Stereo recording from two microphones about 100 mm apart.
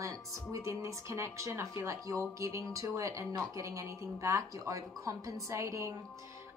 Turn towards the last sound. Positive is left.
turn(degrees=-30)  # may be behind; listen again after turning